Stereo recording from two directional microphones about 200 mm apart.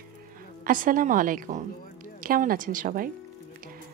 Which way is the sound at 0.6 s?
45° right (ahead or behind).